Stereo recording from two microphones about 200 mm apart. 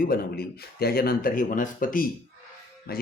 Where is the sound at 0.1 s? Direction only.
50° left (ahead or behind).